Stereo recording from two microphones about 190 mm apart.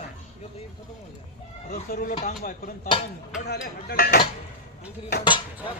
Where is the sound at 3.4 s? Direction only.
55° left (ahead or behind).